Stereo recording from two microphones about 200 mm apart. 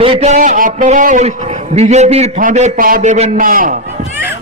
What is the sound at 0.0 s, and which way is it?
A man's voice, 30° right (ahead or behind).